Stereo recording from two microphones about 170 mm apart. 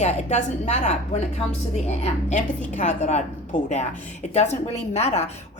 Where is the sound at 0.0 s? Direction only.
40° left (ahead or behind).